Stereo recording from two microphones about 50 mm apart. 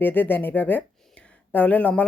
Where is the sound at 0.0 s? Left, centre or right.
Left.